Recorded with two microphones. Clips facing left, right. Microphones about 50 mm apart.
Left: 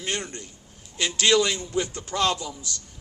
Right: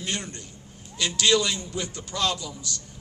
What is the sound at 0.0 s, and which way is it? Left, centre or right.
A man's voice, left.